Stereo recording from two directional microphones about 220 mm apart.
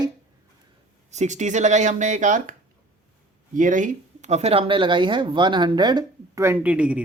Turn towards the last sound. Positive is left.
turn(degrees=-5)  # may be behind; listen again after turning